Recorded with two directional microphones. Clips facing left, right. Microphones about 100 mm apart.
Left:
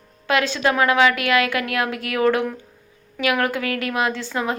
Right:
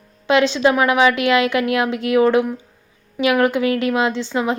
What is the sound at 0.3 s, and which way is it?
A woman's voice, 20° right (ahead or behind).